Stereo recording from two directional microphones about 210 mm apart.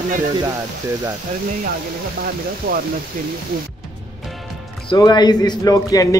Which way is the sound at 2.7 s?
45° right (ahead or behind).